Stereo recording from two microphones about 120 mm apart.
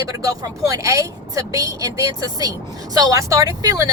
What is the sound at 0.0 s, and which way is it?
A woman's voice, 30° right (ahead or behind).